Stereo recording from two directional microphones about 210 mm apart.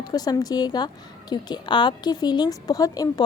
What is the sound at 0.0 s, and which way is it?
A woman's voice, 20° left (ahead or behind).